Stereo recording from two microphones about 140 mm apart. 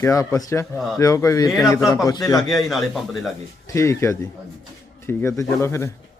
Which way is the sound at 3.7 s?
20° left (ahead or behind).